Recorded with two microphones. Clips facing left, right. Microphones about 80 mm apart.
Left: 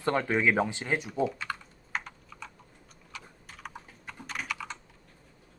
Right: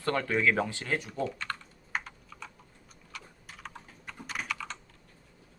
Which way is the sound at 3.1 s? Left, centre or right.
Centre.